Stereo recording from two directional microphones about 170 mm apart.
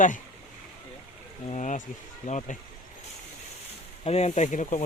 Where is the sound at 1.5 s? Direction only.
45° left (ahead or behind).